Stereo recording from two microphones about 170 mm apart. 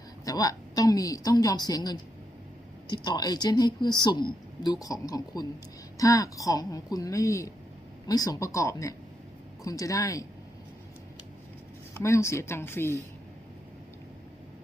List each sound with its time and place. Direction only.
0.3 s speech: 20° left (ahead or behind)
11.9 s speech: 15° left (ahead or behind)